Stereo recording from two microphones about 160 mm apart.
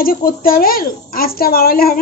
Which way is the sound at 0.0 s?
65° left (ahead or behind).